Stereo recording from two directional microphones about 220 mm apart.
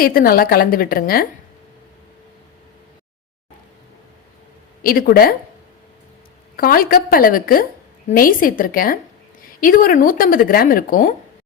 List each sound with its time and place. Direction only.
0.0 s a woman's voice: 40° left (ahead or behind)
4.8 s speech: 40° left (ahead or behind)
6.6 s a woman's voice: 40° left (ahead or behind)